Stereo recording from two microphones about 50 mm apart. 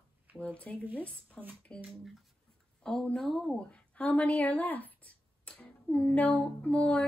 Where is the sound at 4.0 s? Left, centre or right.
Left.